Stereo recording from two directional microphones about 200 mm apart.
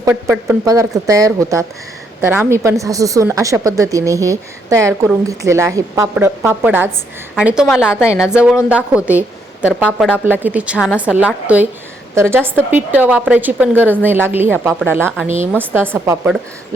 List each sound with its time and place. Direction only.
0.0 s a woman's voice: 15° right (ahead or behind)